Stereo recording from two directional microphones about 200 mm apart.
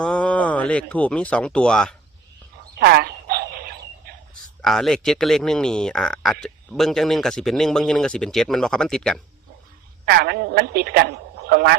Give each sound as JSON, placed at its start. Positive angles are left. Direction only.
{"t": 0.0, "sound": "speech", "side_deg": 5}
{"t": 2.7, "sound": "bird", "side_deg": -50}
{"t": 4.6, "sound": "speech", "side_deg": 0}
{"t": 10.1, "sound": "a man's voice", "side_deg": -50}